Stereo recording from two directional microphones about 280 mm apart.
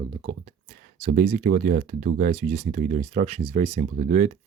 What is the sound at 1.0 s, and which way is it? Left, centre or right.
Speech, right.